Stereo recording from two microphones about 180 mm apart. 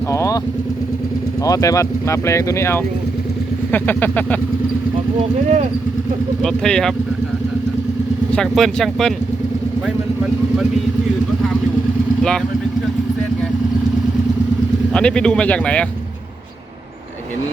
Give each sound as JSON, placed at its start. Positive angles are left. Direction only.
{"t": 0.1, "sound": "speech", "side_deg": 15}
{"t": 1.5, "sound": "speech", "side_deg": 20}
{"t": 6.4, "sound": "speech", "side_deg": 5}
{"t": 8.3, "sound": "speech", "side_deg": 5}
{"t": 14.9, "sound": "speech", "side_deg": 5}